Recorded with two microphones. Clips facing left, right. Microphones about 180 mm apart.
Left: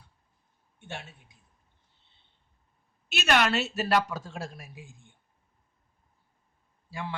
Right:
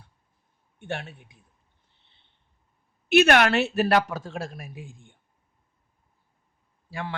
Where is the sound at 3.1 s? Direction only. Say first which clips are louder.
Right 7 dB; 60° right (ahead or behind).